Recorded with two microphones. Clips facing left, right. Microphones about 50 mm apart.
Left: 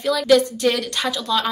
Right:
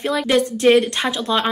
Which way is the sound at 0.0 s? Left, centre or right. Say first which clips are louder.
Left 2 dB; right.